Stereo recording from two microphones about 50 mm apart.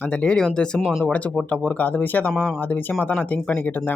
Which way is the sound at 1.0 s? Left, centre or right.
Left.